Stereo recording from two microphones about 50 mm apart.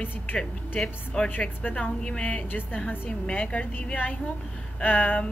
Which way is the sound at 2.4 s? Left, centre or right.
Left.